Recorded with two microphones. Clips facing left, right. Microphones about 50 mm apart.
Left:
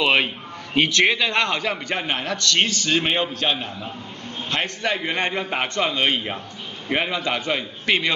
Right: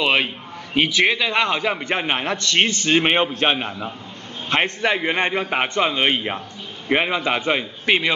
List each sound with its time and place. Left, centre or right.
0.0 s a man's voice: centre